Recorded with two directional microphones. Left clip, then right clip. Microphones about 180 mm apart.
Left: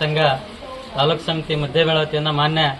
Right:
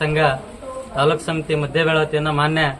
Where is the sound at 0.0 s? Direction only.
15° right (ahead or behind).